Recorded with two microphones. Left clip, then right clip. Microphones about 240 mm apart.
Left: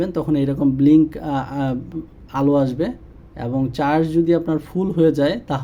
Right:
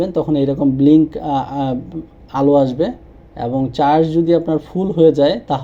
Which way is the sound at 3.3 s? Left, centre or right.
Centre.